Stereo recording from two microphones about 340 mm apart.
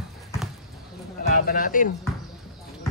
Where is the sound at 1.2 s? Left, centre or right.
Left.